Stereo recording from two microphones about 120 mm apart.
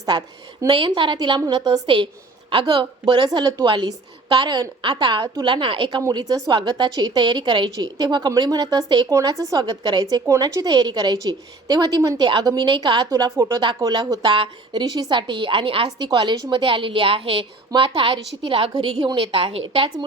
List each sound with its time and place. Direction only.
0.0 s a woman's voice: 35° right (ahead or behind)
6.0 s a woman's voice: 30° right (ahead or behind); by 16.0 s 50° right (ahead or behind)
16.0 s a woman's voice: 35° right (ahead or behind)